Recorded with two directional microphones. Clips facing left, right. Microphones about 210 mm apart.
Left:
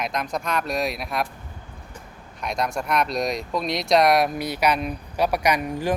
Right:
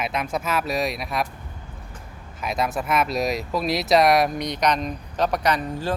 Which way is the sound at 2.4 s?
5° right (ahead or behind).